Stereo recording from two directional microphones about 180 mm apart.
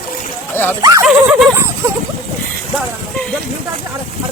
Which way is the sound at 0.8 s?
20° right (ahead or behind).